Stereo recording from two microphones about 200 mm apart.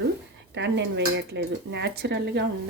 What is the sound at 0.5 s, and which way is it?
Dishes, 60° right (ahead or behind).